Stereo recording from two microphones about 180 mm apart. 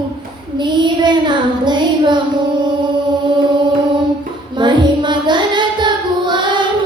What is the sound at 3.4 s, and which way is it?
Music, 25° right (ahead or behind).